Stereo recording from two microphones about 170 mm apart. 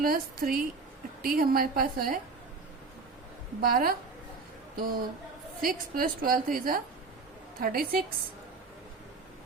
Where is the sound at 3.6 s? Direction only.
60° right (ahead or behind).